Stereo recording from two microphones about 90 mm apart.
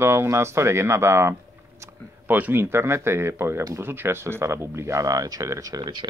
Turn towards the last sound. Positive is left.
turn(degrees=-60)  # may be behind; listen again after turning